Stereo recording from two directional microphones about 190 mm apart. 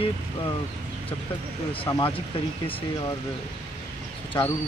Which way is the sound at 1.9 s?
25° left (ahead or behind).